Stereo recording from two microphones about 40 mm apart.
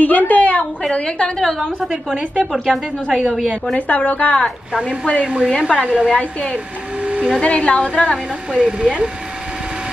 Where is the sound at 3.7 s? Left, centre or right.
Left.